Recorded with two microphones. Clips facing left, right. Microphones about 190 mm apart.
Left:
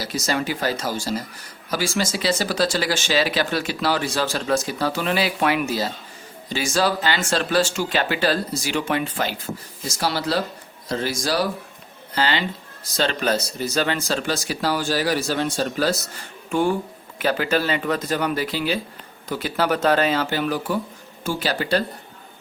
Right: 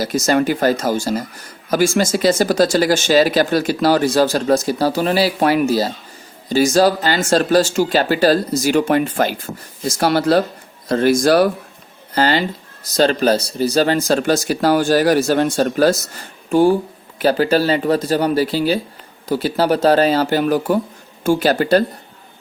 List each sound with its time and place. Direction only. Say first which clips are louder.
0.0 s speech: right 8 dB; 50° right (ahead or behind)
12.1 s speech: right 6 dB; 45° right (ahead or behind)
16.5 s speech: right 8 dB; 35° right (ahead or behind)